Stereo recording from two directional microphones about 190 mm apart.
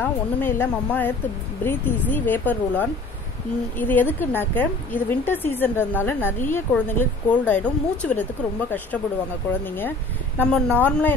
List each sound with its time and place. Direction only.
0.0 s a woman's voice: 10° left (ahead or behind)
9.8 s a woman's voice: 10° left (ahead or behind)